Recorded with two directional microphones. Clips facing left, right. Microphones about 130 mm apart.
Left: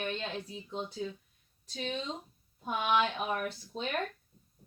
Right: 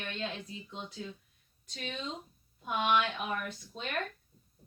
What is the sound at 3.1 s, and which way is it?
Speech, 35° left (ahead or behind).